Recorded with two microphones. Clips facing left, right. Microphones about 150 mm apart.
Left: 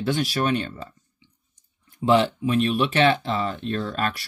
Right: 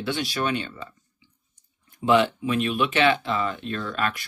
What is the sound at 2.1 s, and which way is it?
Speech, 35° left (ahead or behind).